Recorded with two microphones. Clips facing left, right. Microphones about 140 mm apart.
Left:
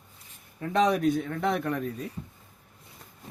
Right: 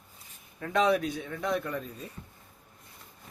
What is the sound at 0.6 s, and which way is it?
A man's voice, 40° left (ahead or behind).